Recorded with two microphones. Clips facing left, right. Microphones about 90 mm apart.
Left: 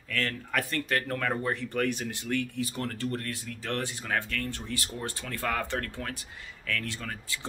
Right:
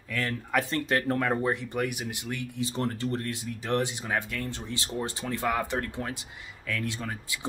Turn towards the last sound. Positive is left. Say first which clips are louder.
# right 2 dB
turn(degrees=-20)  # may be behind; listen again after turning